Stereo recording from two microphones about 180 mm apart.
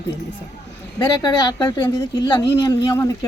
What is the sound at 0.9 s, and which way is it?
Speech, 25° left (ahead or behind).